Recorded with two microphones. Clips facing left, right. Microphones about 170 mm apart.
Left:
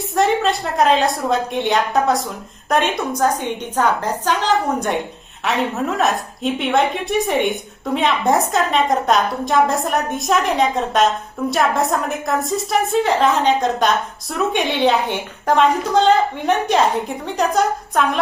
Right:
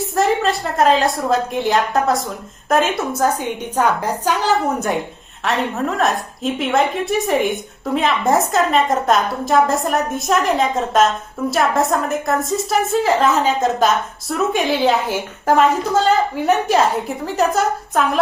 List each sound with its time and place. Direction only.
0.1 s a woman's voice: centre (ahead or behind)